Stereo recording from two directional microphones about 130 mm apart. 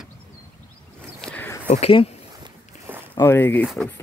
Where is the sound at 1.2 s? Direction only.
10° left (ahead or behind).